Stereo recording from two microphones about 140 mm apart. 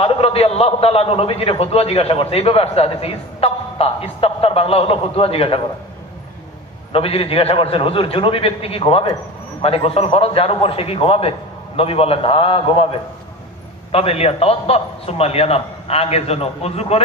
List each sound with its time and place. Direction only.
0.0 s a man's voice: 45° left (ahead or behind)
6.9 s a man's voice: 40° left (ahead or behind)
13.9 s a man's voice: 45° left (ahead or behind)